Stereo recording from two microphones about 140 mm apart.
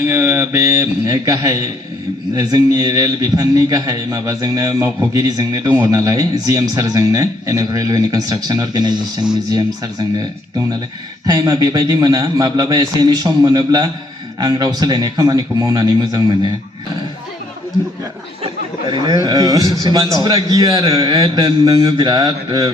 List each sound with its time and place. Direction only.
0.1 s speech: 20° right (ahead or behind)
11.3 s speech: 25° right (ahead or behind)
18.9 s speech: 30° right (ahead or behind)